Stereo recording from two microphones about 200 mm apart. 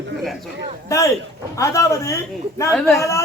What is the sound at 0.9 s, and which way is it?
A woman's voice, 15° left (ahead or behind).